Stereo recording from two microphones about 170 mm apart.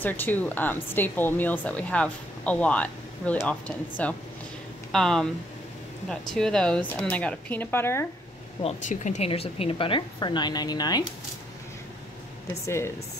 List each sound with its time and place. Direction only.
0.0 s speech: 10° left (ahead or behind)
8.6 s speech: 45° left (ahead or behind); by 11.1 s 25° left (ahead or behind)
12.6 s speech: 15° left (ahead or behind)